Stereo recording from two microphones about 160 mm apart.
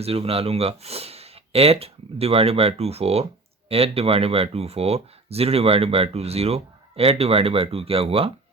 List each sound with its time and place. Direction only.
0.0 s speech: 40° right (ahead or behind)